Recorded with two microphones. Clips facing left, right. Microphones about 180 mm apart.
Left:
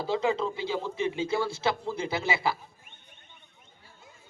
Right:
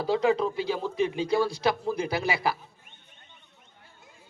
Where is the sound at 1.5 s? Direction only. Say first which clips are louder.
Right 3 dB; 15° right (ahead or behind).